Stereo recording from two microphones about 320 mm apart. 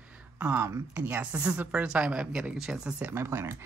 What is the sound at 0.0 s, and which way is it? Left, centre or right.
A woman's voice, centre.